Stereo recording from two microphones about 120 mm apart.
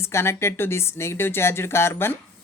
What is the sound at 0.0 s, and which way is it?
Speech, 20° left (ahead or behind).